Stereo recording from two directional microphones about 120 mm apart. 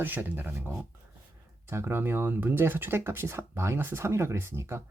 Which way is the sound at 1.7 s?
20° right (ahead or behind).